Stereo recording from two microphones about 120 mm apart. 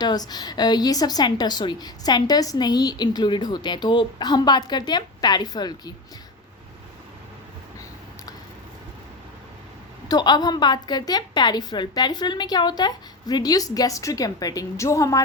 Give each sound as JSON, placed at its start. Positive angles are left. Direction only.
{"t": 0.0, "sound": "a woman's voice", "side_deg": 35}
{"t": 10.1, "sound": "a woman's voice", "side_deg": 35}